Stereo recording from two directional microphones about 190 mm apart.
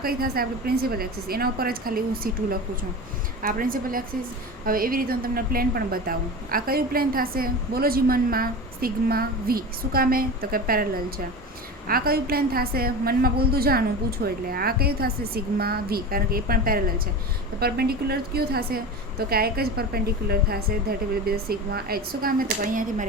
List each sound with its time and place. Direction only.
0.0 s a woman's voice: 50° right (ahead or behind)